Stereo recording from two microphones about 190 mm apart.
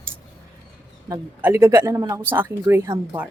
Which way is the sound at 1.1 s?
10° right (ahead or behind).